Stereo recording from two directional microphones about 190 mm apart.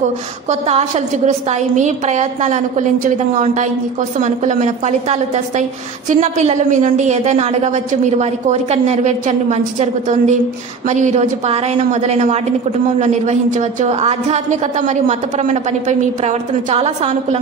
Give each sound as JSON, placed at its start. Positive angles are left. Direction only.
{"t": 0.5, "sound": "a woman's voice", "side_deg": -35}